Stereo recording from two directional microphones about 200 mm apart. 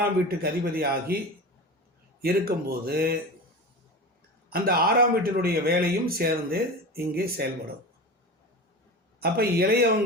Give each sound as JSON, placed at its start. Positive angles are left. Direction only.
{"t": 0.0, "sound": "speech", "side_deg": -50}
{"t": 2.2, "sound": "speech", "side_deg": -50}
{"t": 4.4, "sound": "speech", "side_deg": -50}
{"t": 9.2, "sound": "speech", "side_deg": -50}